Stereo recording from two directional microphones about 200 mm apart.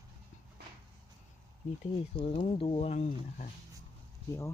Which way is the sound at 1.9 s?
30° left (ahead or behind).